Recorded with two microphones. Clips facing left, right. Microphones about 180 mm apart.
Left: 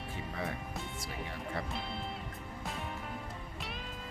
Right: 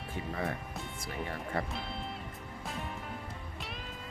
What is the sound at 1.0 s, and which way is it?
Speech, 50° right (ahead or behind).